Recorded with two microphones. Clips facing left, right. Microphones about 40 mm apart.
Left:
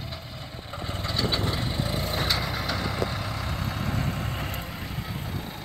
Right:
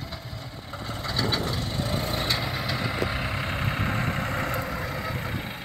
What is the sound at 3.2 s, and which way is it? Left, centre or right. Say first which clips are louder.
Vehicle: right 3 dB; right.